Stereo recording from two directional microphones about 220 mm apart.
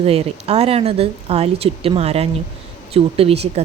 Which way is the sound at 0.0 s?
30° right (ahead or behind).